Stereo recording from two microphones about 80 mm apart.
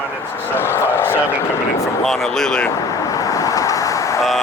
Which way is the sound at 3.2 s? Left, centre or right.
Left.